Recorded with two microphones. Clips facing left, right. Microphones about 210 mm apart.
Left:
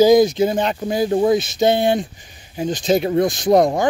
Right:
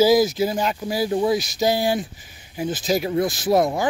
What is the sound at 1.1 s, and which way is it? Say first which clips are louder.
Speech: left 4 dB; 50° left (ahead or behind).